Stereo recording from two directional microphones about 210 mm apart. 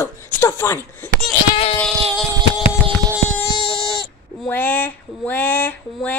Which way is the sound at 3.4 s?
25° left (ahead or behind).